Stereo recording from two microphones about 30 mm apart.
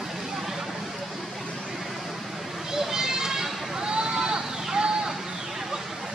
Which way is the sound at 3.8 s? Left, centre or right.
Right.